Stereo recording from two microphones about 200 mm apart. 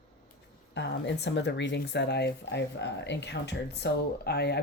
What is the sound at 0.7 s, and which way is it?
Speech, 60° left (ahead or behind).